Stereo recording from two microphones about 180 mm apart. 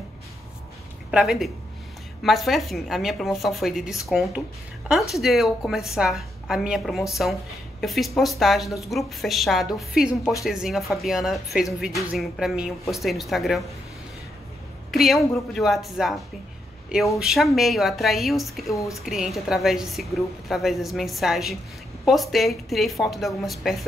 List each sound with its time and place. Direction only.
1.1 s a woman's voice: centre (ahead or behind)
14.9 s a woman's voice: centre (ahead or behind)
17.2 s a woman's voice: centre (ahead or behind)
18.7 s speech: 15° left (ahead or behind)
19.0 s a woman's voice: centre (ahead or behind)